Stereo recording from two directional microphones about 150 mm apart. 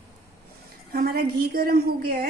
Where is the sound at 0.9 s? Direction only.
85° right.